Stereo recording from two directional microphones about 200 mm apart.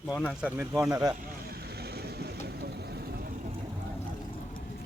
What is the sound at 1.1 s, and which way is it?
Vehicle, 45° right (ahead or behind).